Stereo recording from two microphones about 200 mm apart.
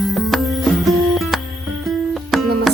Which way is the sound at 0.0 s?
Centre (ahead or behind).